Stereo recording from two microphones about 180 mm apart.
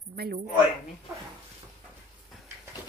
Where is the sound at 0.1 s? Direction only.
50° right (ahead or behind).